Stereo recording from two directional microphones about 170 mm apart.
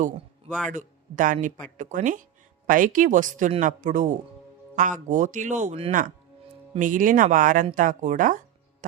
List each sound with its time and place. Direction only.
0.7 s speech: 50° right (ahead or behind)
6.7 s speech: 50° right (ahead or behind)